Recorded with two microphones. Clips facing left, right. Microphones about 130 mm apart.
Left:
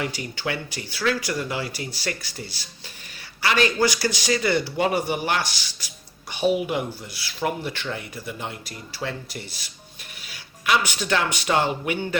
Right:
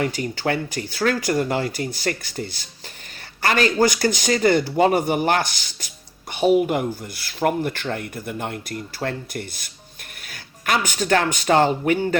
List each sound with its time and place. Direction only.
0.0 s speech: 45° right (ahead or behind)